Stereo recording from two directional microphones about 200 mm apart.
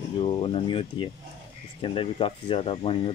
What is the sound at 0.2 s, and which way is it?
Speech, 25° left (ahead or behind).